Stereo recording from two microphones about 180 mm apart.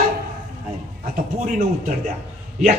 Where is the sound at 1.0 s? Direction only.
45° right (ahead or behind).